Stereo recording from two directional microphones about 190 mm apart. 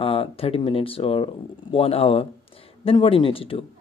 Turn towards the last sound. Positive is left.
turn(degrees=30)  # may be behind; listen again after turning